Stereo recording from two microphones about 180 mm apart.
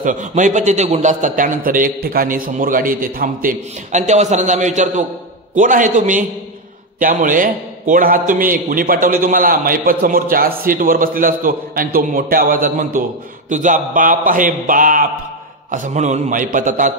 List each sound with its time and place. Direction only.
0.0 s a man's voice: 45° right (ahead or behind)